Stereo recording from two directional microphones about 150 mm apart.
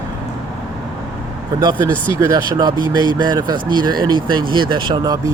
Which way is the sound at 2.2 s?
25° right (ahead or behind).